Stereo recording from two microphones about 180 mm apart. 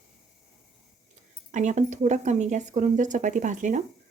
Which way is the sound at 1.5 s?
40° right (ahead or behind).